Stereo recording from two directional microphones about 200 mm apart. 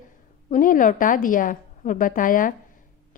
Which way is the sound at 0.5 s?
40° left (ahead or behind).